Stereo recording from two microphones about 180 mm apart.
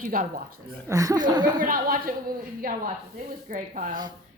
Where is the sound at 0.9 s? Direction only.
20° right (ahead or behind).